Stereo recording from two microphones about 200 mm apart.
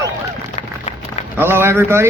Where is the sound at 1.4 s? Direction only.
10° right (ahead or behind).